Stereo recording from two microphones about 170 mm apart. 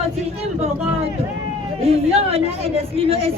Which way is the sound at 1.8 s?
35° right (ahead or behind).